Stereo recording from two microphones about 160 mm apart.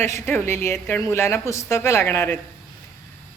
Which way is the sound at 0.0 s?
15° left (ahead or behind).